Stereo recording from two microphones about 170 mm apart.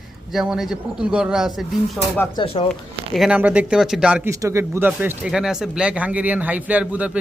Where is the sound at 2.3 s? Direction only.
35° left (ahead or behind).